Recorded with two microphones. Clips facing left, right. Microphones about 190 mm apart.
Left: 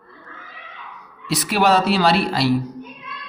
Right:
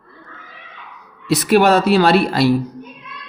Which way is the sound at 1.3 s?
50° right (ahead or behind).